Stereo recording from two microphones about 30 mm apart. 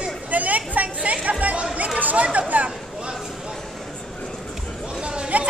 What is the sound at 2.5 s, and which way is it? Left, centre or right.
Speech, right.